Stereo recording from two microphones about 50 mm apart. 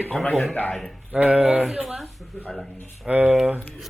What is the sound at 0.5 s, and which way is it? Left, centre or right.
Speech, left.